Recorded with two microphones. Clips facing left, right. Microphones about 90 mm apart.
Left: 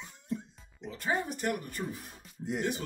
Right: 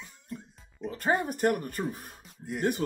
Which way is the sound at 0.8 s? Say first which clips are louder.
Right 5 dB; 50° right (ahead or behind).